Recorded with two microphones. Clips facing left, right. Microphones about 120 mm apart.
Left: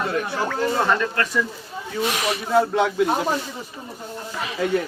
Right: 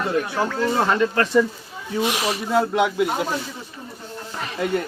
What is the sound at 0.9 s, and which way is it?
Speech, 20° right (ahead or behind).